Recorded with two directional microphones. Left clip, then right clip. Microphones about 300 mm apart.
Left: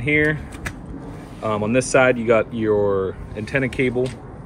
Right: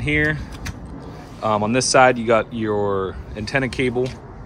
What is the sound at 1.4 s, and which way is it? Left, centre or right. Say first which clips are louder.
A man's voice: right 2 dB; centre.